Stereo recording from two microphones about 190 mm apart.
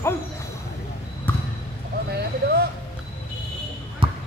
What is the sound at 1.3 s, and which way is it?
Basketball bounce, 10° left (ahead or behind).